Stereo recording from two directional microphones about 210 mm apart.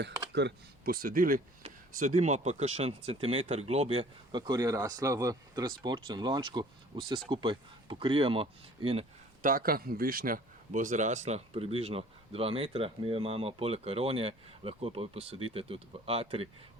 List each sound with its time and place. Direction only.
0.3 s speech: 50° right (ahead or behind); by 9.0 s 25° right (ahead or behind)
9.4 s speech: 40° right (ahead or behind)